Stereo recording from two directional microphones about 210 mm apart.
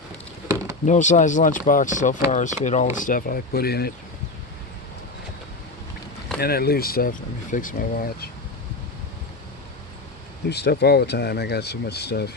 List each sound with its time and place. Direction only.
0.9 s speech: 35° left (ahead or behind)
6.4 s speech: 45° left (ahead or behind)
10.5 s speech: 50° left (ahead or behind)